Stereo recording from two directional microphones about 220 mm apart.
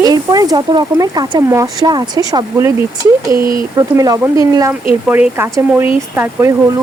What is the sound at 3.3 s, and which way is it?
Speech, 40° right (ahead or behind).